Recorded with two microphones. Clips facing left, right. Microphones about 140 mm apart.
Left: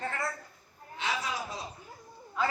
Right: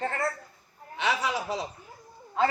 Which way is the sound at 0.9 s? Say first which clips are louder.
Right 6 dB; 75° right (ahead or behind).